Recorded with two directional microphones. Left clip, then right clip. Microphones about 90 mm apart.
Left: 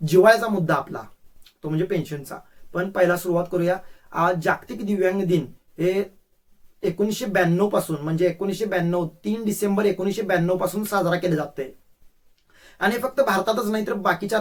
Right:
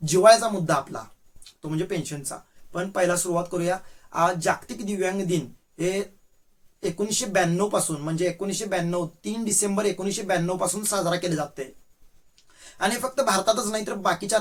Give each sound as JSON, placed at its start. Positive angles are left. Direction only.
{"t": 0.0, "sound": "speech", "side_deg": -20}
{"t": 12.7, "sound": "speech", "side_deg": -20}